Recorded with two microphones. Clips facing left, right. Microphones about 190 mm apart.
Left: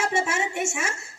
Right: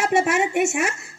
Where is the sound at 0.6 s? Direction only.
60° right (ahead or behind).